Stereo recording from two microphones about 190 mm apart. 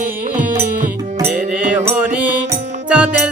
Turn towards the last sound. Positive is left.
turn(degrees=-5)  # may be behind; listen again after turning